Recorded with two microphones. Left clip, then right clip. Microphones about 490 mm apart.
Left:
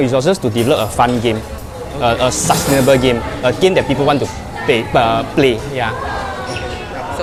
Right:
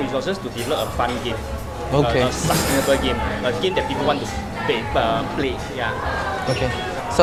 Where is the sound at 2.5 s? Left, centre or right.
Left.